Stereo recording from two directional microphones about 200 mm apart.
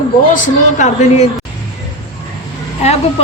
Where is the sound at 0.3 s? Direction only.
40° left (ahead or behind).